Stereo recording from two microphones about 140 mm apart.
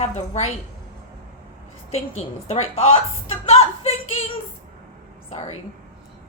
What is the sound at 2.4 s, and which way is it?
A woman's voice, 50° left (ahead or behind).